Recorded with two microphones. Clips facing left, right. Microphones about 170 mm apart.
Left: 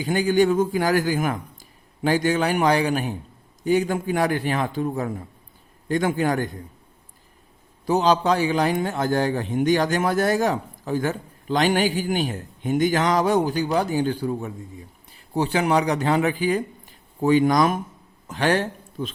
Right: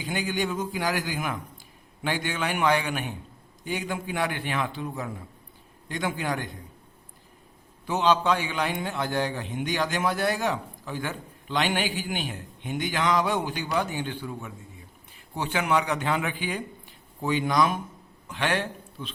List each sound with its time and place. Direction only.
0.0 s a man's voice: 45° left (ahead or behind)
7.9 s a man's voice: 40° left (ahead or behind)